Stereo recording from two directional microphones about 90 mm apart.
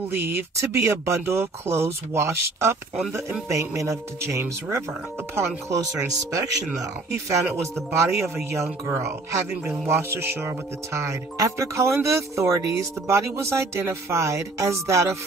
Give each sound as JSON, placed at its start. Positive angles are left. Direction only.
{"t": 0.1, "sound": "speech", "side_deg": -20}
{"t": 7.2, "sound": "speech", "side_deg": -30}